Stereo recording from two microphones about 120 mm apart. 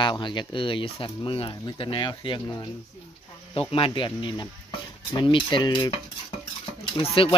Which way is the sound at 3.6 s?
50° left (ahead or behind).